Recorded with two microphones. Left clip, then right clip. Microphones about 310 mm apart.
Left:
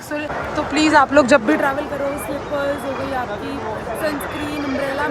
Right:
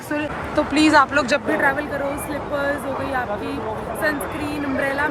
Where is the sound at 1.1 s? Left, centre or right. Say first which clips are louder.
Left 6 dB; left.